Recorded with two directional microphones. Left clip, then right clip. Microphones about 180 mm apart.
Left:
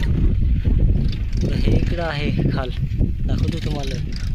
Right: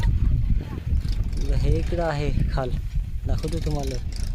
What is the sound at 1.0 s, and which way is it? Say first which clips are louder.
Vehicle: left 8 dB; 60° right (ahead or behind).